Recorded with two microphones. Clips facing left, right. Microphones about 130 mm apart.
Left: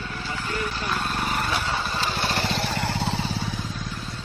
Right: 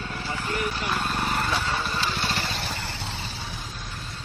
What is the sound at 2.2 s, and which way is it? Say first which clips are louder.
Vehicle: left 4 dB; 55° left (ahead or behind).